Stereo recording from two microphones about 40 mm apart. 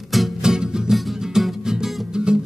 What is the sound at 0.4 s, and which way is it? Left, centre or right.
Music, centre.